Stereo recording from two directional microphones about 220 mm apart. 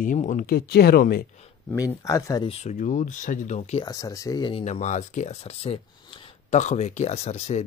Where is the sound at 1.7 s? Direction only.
15° left (ahead or behind); by 3.8 s 30° left (ahead or behind).